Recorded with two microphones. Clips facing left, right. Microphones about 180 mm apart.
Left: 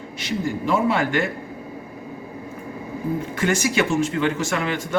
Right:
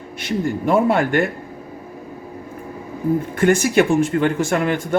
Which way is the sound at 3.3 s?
55° right (ahead or behind).